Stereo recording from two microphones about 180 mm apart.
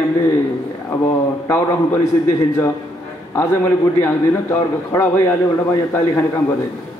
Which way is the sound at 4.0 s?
15° left (ahead or behind).